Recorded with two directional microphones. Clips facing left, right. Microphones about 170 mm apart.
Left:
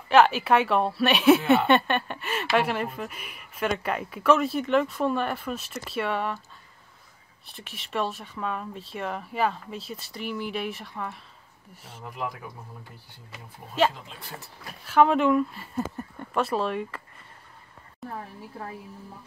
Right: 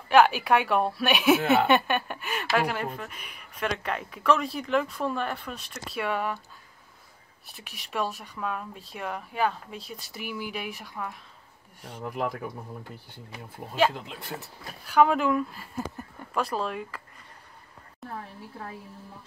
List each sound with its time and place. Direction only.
0.1 s speech: centre (ahead or behind)
7.4 s speech: centre (ahead or behind)
12.0 s speech: 55° right (ahead or behind)
14.9 s speech: centre (ahead or behind)
18.0 s a woman's voice: centre (ahead or behind)